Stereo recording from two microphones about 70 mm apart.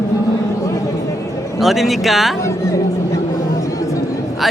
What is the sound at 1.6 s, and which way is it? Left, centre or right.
Speech, centre.